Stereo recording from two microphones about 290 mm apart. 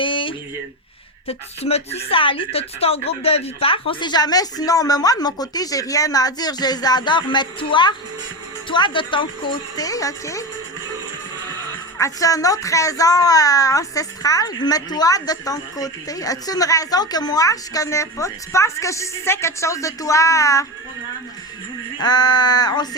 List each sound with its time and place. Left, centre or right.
0.0 s a sound: centre
1.3 s a woman's voice: left
11.9 s a woman's voice: centre
21.9 s a woman's voice: centre